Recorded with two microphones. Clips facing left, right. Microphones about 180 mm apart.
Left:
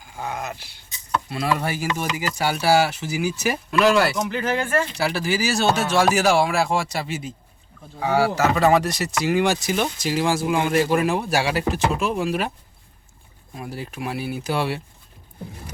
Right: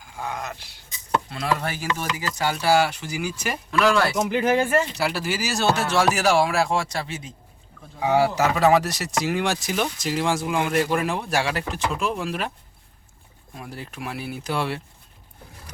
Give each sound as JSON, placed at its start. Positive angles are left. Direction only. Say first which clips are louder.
{"t": 0.0, "sound": "speech", "louder": "left 2 dB", "side_deg": 5}
{"t": 3.7, "sound": "speech", "louder": "left 2 dB", "side_deg": 25}
{"t": 3.9, "sound": "speech", "louder": "left 2 dB", "side_deg": 5}
{"t": 4.3, "sound": "speech", "louder": "right 3 dB", "side_deg": -10}
{"t": 4.9, "sound": "speech", "louder": "left 3 dB", "side_deg": 0}
{"t": 7.9, "sound": "speech", "louder": "even", "side_deg": -20}
{"t": 8.5, "sound": "speech", "louder": "even", "side_deg": -5}
{"t": 13.6, "sound": "speech", "louder": "left 4 dB", "side_deg": 5}